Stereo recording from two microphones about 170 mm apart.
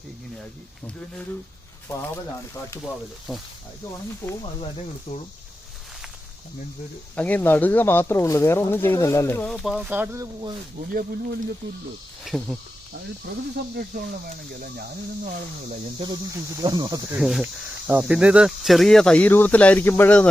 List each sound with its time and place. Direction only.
2.8 s speech: centre (ahead or behind)
7.2 s speech: 10° left (ahead or behind)
9.5 s speech: centre (ahead or behind)
12.2 s speech: centre (ahead or behind)
13.7 s speech: 65° right (ahead or behind)
16.3 s speech: 20° right (ahead or behind)
17.2 s speech: 5° right (ahead or behind)